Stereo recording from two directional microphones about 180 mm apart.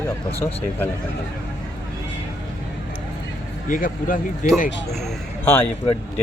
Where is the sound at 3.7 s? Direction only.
50° left (ahead or behind).